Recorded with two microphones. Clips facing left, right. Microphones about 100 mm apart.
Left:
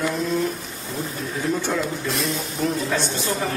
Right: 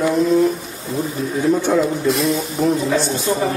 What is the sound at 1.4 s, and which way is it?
Speech, 20° right (ahead or behind).